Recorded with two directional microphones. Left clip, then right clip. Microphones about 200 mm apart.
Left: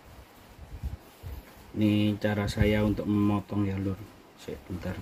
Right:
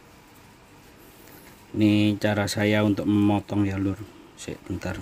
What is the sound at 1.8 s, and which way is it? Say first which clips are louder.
Speech: right 6 dB; 60° right (ahead or behind).